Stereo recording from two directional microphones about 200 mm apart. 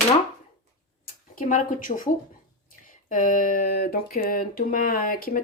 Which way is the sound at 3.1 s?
40° left (ahead or behind).